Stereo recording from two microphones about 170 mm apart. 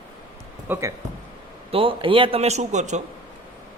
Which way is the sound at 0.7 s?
15° right (ahead or behind).